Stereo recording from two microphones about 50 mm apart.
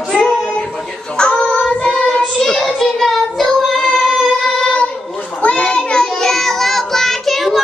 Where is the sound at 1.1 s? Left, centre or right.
Left.